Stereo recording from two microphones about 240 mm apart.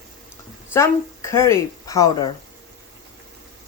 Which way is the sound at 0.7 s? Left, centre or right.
Centre.